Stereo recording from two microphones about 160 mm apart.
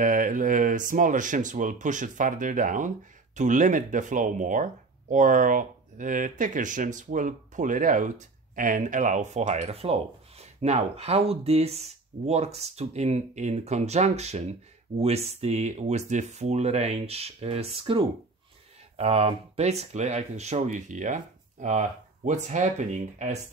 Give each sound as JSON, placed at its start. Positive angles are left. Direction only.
{"t": 0.0, "sound": "speech", "side_deg": -55}